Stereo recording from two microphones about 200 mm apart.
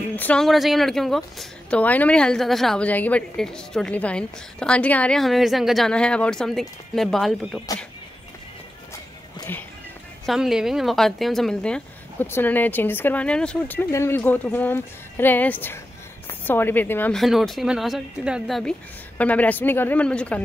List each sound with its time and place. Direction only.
0.1 s speech: 5° left (ahead or behind)
9.4 s music: 10° left (ahead or behind)
10.2 s a woman's voice: centre (ahead or behind)